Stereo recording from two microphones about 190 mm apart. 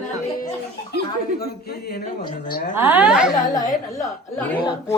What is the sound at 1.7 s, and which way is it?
Speech, 55° left (ahead or behind).